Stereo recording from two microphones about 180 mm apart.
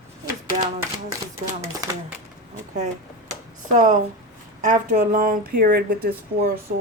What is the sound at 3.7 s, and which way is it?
Speech, 45° right (ahead or behind).